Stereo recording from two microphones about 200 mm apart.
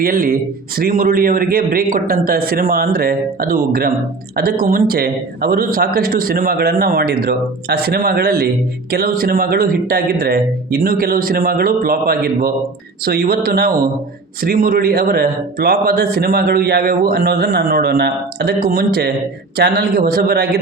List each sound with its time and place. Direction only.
0.0 s a man's voice: 45° right (ahead or behind)